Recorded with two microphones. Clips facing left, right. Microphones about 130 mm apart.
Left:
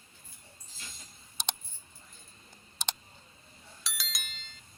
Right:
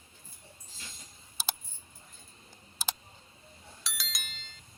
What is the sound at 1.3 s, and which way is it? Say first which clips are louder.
Keys jangling: even; 5° right (ahead or behind).